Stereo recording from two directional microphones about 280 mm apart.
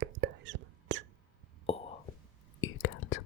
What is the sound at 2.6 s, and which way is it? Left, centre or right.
Whispering, left.